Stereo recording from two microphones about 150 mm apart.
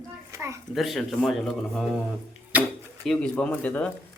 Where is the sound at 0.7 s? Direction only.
Centre (ahead or behind).